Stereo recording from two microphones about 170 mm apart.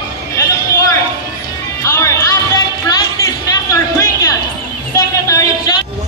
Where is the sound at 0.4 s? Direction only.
20° left (ahead or behind).